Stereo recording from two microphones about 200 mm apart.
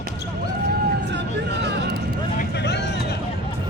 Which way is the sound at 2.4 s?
55° left (ahead or behind).